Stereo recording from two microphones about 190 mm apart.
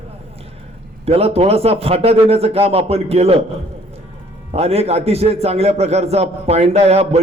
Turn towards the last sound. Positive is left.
turn(degrees=-35)  # may be behind; listen again after turning